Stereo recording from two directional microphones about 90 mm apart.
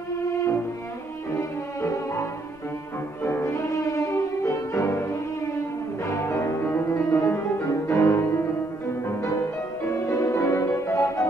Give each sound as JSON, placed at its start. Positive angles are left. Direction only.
{"t": 3.3, "sound": "music", "side_deg": 30}
{"t": 6.2, "sound": "music", "side_deg": 35}
{"t": 10.0, "sound": "music", "side_deg": 35}